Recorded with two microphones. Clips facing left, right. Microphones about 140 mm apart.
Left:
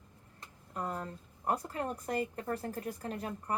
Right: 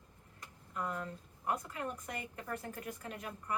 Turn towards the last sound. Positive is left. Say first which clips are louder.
# left 5 dB
turn(degrees=35)  # may be behind; listen again after turning